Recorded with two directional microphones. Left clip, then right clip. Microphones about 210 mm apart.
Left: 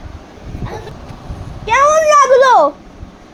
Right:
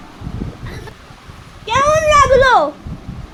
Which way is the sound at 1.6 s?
5° right (ahead or behind).